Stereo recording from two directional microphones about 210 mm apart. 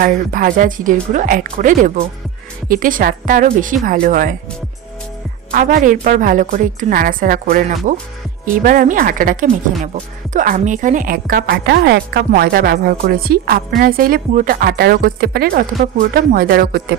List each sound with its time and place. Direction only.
0.0 s a woman's voice: 40° right (ahead or behind)
5.5 s a woman's voice: 45° right (ahead or behind)